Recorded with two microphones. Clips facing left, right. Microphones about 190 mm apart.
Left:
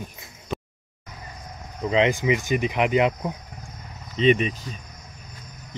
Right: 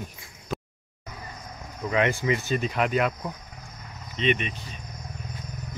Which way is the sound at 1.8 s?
20° left (ahead or behind).